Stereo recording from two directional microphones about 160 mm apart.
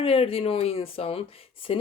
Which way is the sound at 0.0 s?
35° left (ahead or behind).